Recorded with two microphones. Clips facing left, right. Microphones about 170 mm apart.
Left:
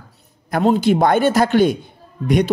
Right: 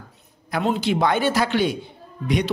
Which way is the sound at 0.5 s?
45° left (ahead or behind).